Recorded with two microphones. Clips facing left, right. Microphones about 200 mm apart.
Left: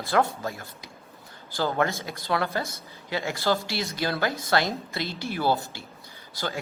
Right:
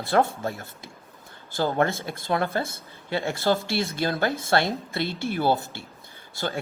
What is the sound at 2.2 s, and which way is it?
Speech, 50° right (ahead or behind).